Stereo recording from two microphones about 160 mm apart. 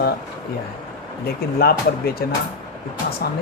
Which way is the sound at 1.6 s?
70° left (ahead or behind).